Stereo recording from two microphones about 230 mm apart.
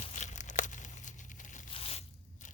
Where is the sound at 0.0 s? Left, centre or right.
Left.